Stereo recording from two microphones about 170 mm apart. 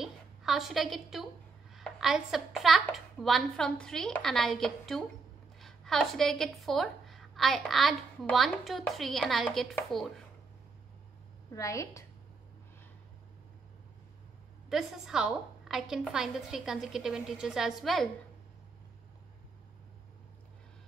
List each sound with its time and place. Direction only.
0.0 s a woman's voice: centre (ahead or behind)
11.5 s a woman's voice: 20° left (ahead or behind)
14.7 s a woman's voice: centre (ahead or behind)